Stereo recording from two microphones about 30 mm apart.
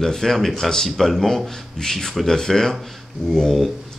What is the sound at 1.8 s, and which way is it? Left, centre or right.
Speech, centre.